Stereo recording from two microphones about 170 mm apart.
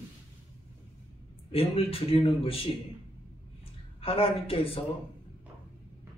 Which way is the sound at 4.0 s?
35° left (ahead or behind).